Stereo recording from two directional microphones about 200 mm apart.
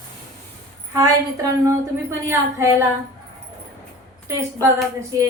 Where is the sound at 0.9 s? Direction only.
15° right (ahead or behind).